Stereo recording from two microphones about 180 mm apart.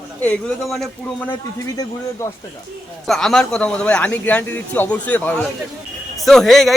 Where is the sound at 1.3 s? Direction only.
20° left (ahead or behind).